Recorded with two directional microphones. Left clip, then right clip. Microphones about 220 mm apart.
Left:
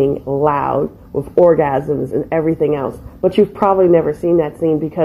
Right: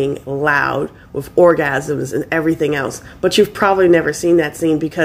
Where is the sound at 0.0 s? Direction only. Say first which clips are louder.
Left 3 dB; 15° right (ahead or behind).